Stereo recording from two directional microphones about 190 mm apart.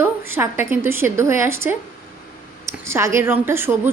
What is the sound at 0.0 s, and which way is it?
A woman's voice, 10° right (ahead or behind).